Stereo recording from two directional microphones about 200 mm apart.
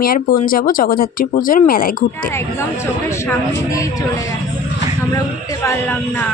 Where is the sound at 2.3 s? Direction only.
15° left (ahead or behind).